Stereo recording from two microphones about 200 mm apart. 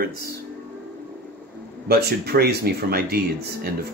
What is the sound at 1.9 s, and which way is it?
Speech, 50° right (ahead or behind).